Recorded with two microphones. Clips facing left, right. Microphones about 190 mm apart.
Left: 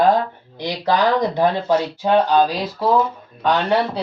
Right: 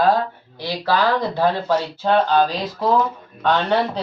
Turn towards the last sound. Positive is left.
turn(degrees=10)  # may be behind; listen again after turning